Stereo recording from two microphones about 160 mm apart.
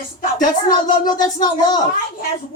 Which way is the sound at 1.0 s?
25° left (ahead or behind).